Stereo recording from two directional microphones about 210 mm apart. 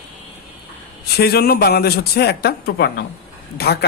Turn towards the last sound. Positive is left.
turn(degrees=50)  # may be behind; listen again after turning